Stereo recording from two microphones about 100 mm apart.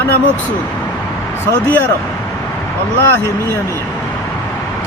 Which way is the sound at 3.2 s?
25° left (ahead or behind).